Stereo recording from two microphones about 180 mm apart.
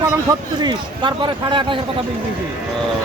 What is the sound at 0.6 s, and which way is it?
Speech, 25° right (ahead or behind).